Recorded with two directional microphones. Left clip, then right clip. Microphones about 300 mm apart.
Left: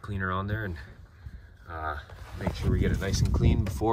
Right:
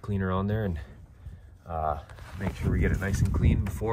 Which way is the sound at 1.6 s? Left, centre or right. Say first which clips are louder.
Right 5 dB; left.